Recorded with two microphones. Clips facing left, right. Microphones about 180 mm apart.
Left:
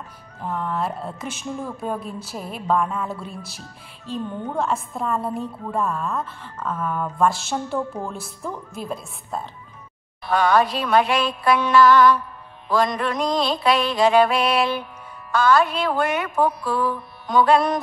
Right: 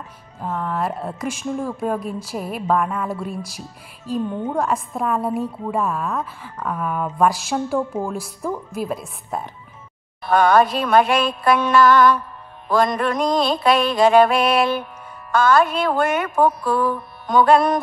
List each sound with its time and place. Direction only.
0.4 s a woman's voice: centre (ahead or behind)
4.4 s speech: 15° right (ahead or behind)
4.9 s a woman's voice: 5° right (ahead or behind)
6.6 s speech: 15° right (ahead or behind)
7.5 s a woman's voice: centre (ahead or behind)
10.2 s a woman's voice: 50° right (ahead or behind)